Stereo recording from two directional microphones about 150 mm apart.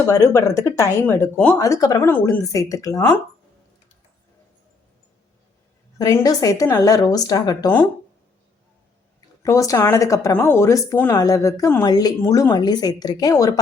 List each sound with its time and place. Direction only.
0.0 s speech: 20° left (ahead or behind)
1.5 s speech: 20° left (ahead or behind)
6.0 s speech: 25° left (ahead or behind)
9.4 s speech: 20° left (ahead or behind)